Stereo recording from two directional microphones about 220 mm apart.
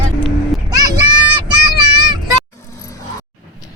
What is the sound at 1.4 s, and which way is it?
Child singing, 20° right (ahead or behind).